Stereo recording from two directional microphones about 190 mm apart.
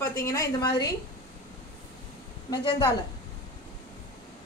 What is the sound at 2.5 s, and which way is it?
Speech, 20° left (ahead or behind).